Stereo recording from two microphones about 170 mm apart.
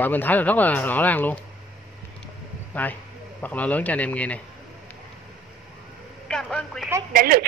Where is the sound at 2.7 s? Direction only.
10° left (ahead or behind).